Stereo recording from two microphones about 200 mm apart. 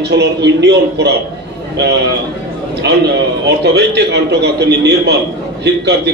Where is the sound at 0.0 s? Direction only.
55° right (ahead or behind).